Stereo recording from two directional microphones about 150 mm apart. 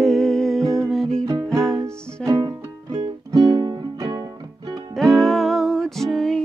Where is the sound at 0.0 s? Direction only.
5° left (ahead or behind).